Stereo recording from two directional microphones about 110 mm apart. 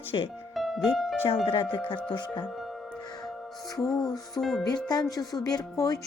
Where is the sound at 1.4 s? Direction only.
55° left (ahead or behind).